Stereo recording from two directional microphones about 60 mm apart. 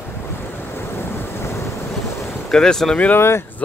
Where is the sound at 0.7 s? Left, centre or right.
Left.